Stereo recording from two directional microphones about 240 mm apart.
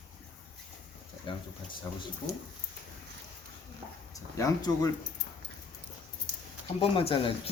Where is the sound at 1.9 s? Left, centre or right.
Centre.